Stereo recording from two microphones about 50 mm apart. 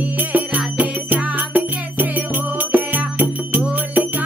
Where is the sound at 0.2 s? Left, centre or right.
Right.